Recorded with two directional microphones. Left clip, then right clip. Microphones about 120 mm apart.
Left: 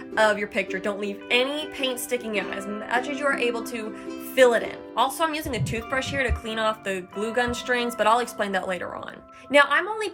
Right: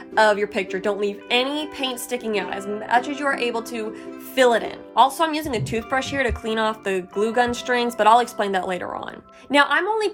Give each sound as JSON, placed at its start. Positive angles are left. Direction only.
{"t": 0.1, "sound": "speech", "side_deg": -20}